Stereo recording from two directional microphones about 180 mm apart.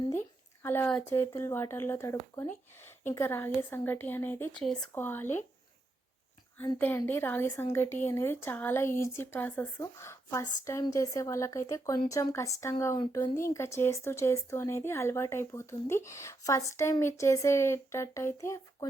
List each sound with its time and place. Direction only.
0.1 s a sound: 10° left (ahead or behind)
1.4 s speech: 15° left (ahead or behind)
6.7 s speech: 10° left (ahead or behind)